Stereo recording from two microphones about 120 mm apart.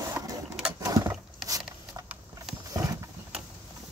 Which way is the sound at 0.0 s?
25° right (ahead or behind).